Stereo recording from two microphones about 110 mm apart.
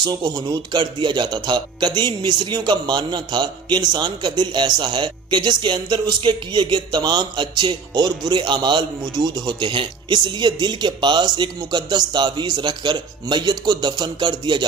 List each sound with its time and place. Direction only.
0.0 s speech: 40° right (ahead or behind)